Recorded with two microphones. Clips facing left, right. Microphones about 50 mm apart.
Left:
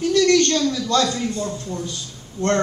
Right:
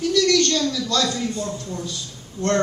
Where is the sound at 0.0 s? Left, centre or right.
Left.